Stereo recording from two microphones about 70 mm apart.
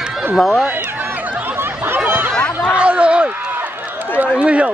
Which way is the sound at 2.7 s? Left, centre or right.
Centre.